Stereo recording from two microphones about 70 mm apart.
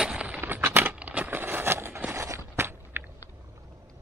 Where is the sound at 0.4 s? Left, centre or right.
Right.